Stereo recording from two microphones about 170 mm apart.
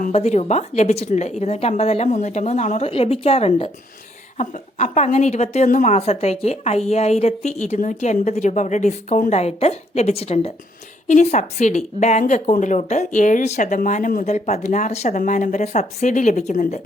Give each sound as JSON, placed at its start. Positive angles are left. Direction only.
{"t": 0.0, "sound": "a woman's voice", "side_deg": 40}